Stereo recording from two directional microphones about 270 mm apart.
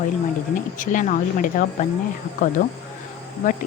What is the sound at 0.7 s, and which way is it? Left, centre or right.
Speech, left.